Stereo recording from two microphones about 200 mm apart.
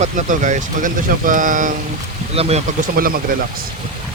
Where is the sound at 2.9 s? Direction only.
45° right (ahead or behind).